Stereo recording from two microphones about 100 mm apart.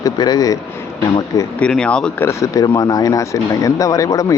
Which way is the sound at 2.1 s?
30° left (ahead or behind).